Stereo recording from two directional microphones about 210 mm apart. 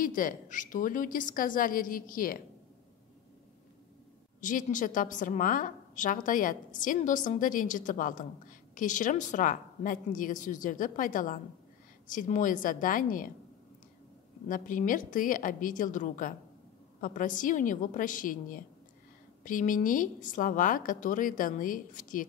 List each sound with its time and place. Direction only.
0.0 s a woman's voice: 40° left (ahead or behind)
4.4 s a woman's voice: 40° left (ahead or behind)
14.5 s a woman's voice: 40° left (ahead or behind)